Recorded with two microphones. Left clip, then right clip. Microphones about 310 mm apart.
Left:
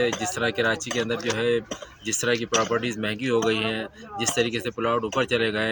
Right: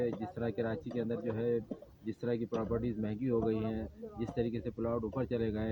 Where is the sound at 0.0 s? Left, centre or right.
Right.